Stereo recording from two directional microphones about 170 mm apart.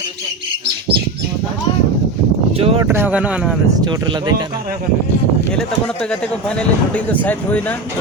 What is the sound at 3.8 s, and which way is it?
Speech, 25° right (ahead or behind).